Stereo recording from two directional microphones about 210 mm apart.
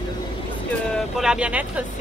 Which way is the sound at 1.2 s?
5° right (ahead or behind).